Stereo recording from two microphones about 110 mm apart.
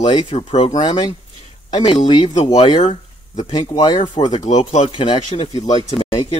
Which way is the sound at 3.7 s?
40° left (ahead or behind).